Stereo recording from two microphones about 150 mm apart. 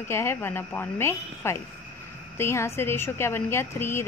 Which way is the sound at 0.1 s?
15° left (ahead or behind).